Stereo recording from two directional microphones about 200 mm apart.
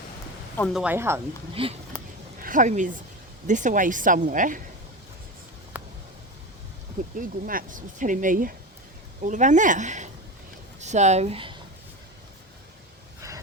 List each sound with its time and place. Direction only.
0.7 s speech: 5° right (ahead or behind)
1.6 s speech: 25° right (ahead or behind)
2.4 s speech: 40° right (ahead or behind)
5.7 s a sound: 10° right (ahead or behind)
7.2 s speech: 45° right (ahead or behind); by 11.5 s 30° right (ahead or behind)